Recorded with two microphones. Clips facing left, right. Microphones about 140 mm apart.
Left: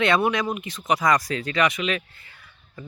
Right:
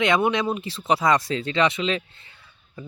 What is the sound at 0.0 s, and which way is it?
Speech, 20° right (ahead or behind).